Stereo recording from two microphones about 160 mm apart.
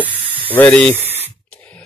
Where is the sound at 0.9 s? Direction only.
40° right (ahead or behind).